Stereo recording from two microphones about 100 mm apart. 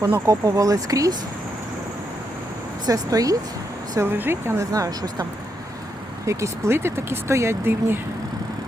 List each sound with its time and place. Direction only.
0.0 s speech: 30° right (ahead or behind)
2.8 s speech: 35° right (ahead or behind)
3.9 s speech: 20° right (ahead or behind); by 5.2 s 40° right (ahead or behind)
6.2 s speech: 25° right (ahead or behind)